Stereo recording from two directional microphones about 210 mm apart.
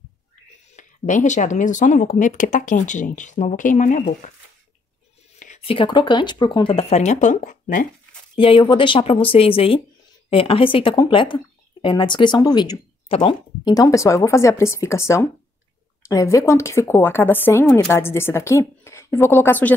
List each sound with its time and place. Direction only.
0.7 s speech: 35° left (ahead or behind)
5.4 s speech: 30° left (ahead or behind)
8.4 s speech: 25° left (ahead or behind)